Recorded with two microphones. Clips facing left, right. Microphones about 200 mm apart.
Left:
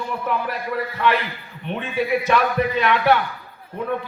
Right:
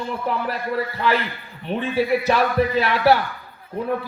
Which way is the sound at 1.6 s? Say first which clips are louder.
Right 3 dB; 35° right (ahead or behind).